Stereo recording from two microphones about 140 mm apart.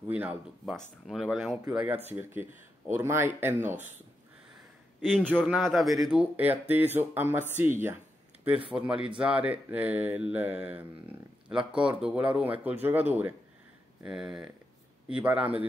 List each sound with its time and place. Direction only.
0.1 s mantra: 10° right (ahead or behind)
0.7 s speech: centre (ahead or behind)
1.7 s mantra: 5° right (ahead or behind)
5.0 s speech: 5° left (ahead or behind)
6.0 s mantra: 10° right (ahead or behind)
14.0 s speech: 5° right (ahead or behind)
15.0 s mantra: 5° right (ahead or behind)